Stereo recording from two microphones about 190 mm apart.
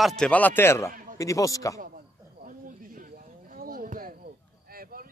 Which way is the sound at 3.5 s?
50° right (ahead or behind).